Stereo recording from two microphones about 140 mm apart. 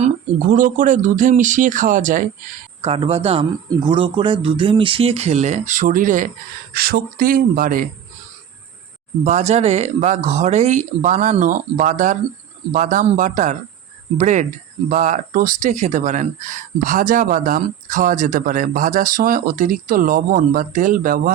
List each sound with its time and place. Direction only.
0.0 s speech: 70° right (ahead or behind)
2.8 s speech: 45° right (ahead or behind); by 6.2 s 70° right (ahead or behind)
6.7 s speech: 90° right
9.2 s speech: 55° right (ahead or behind); by 21.3 s 80° right